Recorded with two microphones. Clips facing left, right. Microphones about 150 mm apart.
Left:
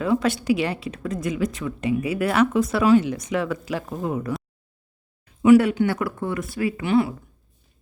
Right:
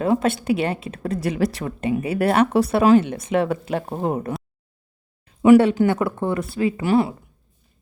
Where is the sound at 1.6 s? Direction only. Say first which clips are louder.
Right 1 dB; 50° right (ahead or behind); by 2.8 s 65° right (ahead or behind).